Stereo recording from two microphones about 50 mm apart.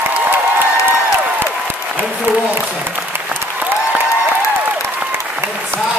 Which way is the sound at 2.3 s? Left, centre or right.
Right.